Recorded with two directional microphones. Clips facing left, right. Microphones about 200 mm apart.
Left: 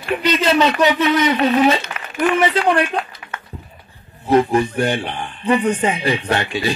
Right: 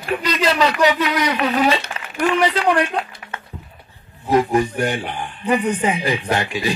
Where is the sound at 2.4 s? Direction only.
30° left (ahead or behind).